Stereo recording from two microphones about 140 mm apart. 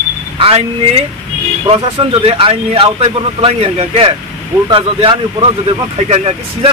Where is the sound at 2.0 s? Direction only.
40° right (ahead or behind).